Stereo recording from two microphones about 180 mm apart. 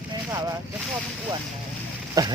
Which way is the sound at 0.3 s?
15° right (ahead or behind).